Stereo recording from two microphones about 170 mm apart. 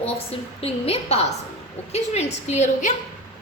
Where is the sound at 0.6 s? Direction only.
35° left (ahead or behind).